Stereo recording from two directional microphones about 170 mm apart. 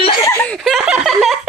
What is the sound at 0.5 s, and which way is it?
Laughter, centre (ahead or behind).